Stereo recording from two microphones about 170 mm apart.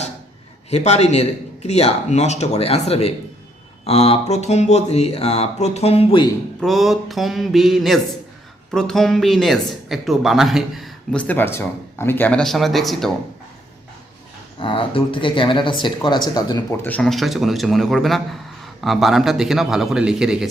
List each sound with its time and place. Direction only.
0.7 s a man's voice: 40° left (ahead or behind)
6.6 s speech: centre (ahead or behind)
14.6 s speech: 30° left (ahead or behind)
16.8 s speech: 5° left (ahead or behind)